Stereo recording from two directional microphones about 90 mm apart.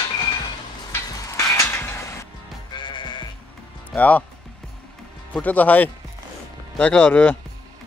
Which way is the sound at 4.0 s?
15° left (ahead or behind).